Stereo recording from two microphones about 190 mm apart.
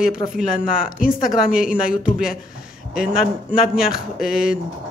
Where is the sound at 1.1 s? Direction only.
50° left (ahead or behind).